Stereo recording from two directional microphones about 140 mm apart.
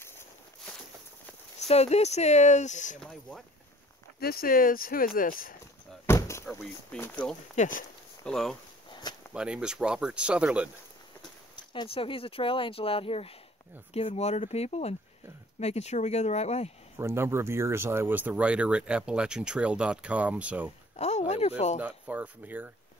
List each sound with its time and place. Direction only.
1.7 s speech: 50° left (ahead or behind)
3.0 s speech: 5° left (ahead or behind)
4.2 s speech: 90° left
6.0 s a sound: 20° left (ahead or behind)
7.0 s speech: 10° left (ahead or behind)
7.5 s speech: 65° left (ahead or behind)
8.3 s speech: centre (ahead or behind)
11.5 s speech: 35° left (ahead or behind); by 16.7 s 50° left (ahead or behind)
17.0 s speech: 20° right (ahead or behind)
20.9 s speech: 50° left (ahead or behind)
21.7 s speech: 10° right (ahead or behind)